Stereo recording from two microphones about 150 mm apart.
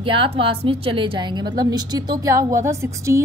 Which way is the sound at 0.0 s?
35° right (ahead or behind).